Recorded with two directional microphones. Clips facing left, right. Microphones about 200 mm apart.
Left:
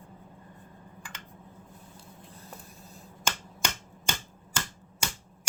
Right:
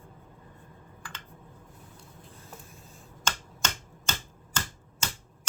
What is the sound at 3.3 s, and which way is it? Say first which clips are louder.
Finger snapping: left 1 dB; 10° left (ahead or behind).